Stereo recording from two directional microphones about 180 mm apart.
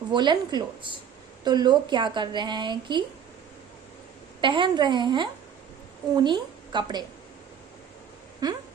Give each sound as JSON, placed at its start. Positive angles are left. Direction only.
{"t": 0.1, "sound": "a woman's voice", "side_deg": -25}
{"t": 4.4, "sound": "a woman's voice", "side_deg": -25}
{"t": 8.4, "sound": "a woman's voice", "side_deg": -20}